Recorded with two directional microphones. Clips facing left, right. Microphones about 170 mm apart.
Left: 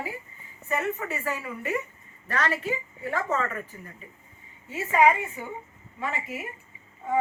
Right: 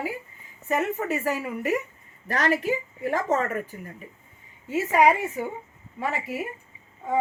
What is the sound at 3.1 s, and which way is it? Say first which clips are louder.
Speech: right 4 dB; 45° right (ahead or behind).